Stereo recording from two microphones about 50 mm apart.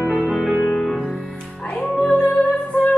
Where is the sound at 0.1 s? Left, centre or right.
Centre.